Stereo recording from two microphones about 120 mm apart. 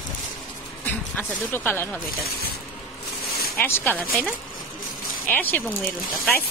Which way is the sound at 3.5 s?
15° left (ahead or behind).